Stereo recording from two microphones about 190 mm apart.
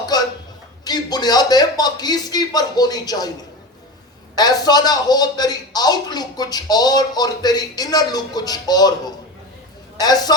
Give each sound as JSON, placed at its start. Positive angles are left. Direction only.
{"t": 0.0, "sound": "a sound", "side_deg": 20}
{"t": 0.9, "sound": "a man's voice", "side_deg": 20}
{"t": 4.4, "sound": "a man's voice", "side_deg": 20}